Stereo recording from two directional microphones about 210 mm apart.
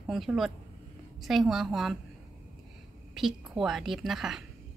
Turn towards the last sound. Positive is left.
turn(degrees=0)  # may be behind; listen again after turning